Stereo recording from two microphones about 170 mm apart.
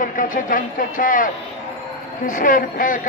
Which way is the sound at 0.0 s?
55° left (ahead or behind).